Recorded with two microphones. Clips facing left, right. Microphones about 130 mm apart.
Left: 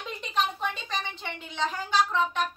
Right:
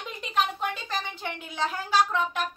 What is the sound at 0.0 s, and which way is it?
Speech, centre (ahead or behind).